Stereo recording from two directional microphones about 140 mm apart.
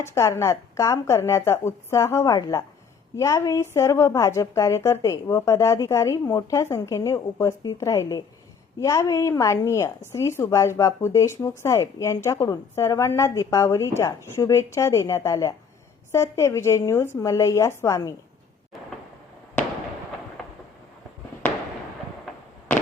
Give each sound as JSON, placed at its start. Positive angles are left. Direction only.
{"t": 0.0, "sound": "a woman's voice", "side_deg": 20}
{"t": 20.4, "sound": "thunder", "side_deg": 5}